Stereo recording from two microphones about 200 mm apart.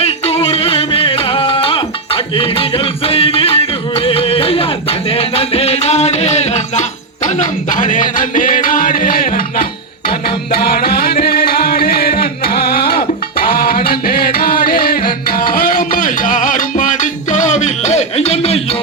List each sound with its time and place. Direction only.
0.0 s music: 30° left (ahead or behind)